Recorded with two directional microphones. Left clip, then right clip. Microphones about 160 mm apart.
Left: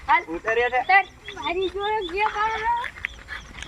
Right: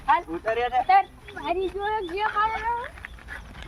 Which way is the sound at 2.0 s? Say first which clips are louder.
Left 3 dB; 25° right (ahead or behind).